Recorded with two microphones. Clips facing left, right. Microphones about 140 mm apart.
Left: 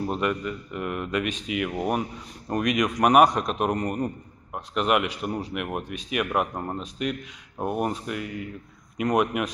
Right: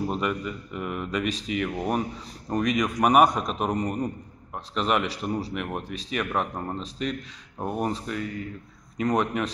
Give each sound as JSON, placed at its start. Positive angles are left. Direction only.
{"t": 0.0, "sound": "speech", "side_deg": 0}